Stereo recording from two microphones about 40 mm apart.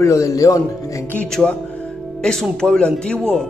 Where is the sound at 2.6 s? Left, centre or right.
Centre.